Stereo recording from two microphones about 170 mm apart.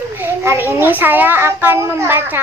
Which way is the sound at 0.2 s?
15° right (ahead or behind).